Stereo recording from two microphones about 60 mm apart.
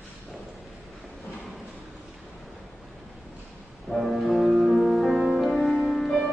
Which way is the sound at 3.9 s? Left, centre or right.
Centre.